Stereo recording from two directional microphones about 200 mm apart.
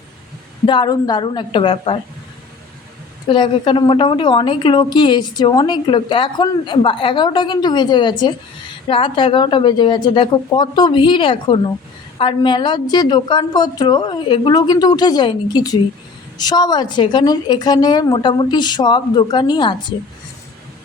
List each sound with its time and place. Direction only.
0.6 s a woman's voice: 20° left (ahead or behind)
3.2 s a woman's voice: 25° left (ahead or behind)